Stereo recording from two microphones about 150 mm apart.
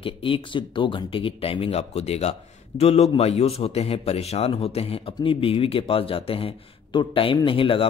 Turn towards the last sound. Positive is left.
turn(degrees=35)  # may be behind; listen again after turning